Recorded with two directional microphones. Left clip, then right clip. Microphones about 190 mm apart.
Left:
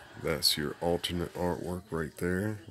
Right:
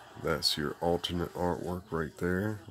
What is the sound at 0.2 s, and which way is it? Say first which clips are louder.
Speech: left 1 dB; 10° left (ahead or behind).